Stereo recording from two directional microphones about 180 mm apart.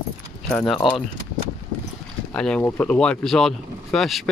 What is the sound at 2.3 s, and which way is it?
Speech, 5° left (ahead or behind).